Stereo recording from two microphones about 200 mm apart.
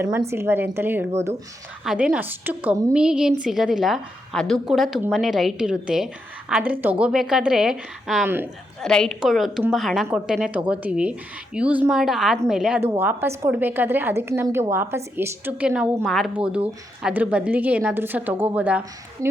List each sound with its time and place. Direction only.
0.0 s a woman's voice: 10° right (ahead or behind)
2.9 s a woman's voice: 5° right (ahead or behind)